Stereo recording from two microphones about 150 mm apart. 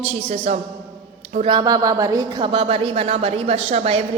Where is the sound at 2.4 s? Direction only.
35° right (ahead or behind).